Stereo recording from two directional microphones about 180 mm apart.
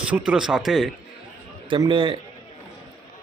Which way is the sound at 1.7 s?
25° right (ahead or behind).